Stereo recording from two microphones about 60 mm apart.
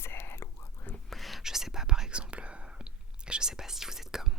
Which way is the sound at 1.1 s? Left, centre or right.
Centre.